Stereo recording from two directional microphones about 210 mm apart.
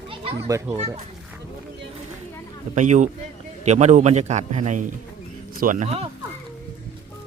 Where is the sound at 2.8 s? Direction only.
35° right (ahead or behind).